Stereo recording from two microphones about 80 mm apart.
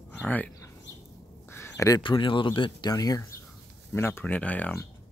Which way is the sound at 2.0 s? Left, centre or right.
Left.